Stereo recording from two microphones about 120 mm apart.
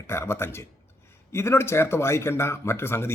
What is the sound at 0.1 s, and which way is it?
A man's voice, 20° left (ahead or behind).